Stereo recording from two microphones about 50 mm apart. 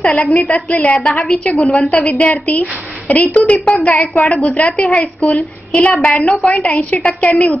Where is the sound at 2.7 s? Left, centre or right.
Right.